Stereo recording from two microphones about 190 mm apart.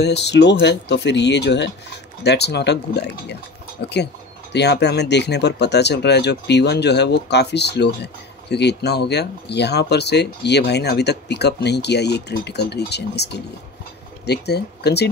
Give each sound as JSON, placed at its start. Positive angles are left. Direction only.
{"t": 0.0, "sound": "speech", "side_deg": 60}